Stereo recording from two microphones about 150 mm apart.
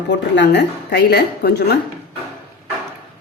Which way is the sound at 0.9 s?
90° left.